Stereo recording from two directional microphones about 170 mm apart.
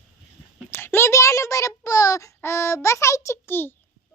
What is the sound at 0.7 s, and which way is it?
A child's voice, 15° left (ahead or behind).